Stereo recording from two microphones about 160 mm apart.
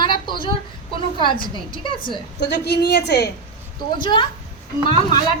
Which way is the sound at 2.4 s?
90° left.